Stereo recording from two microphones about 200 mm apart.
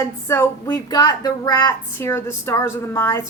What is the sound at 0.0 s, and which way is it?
Speech, 15° left (ahead or behind).